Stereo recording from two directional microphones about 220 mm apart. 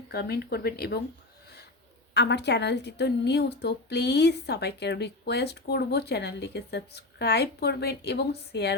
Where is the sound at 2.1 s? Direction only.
50° left (ahead or behind).